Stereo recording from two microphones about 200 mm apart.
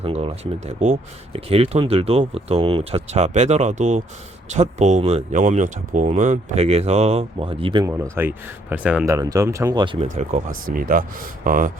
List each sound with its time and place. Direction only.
0.0 s speech: 30° right (ahead or behind)
8.1 s speech: 10° right (ahead or behind)
10.7 s speech: 45° right (ahead or behind)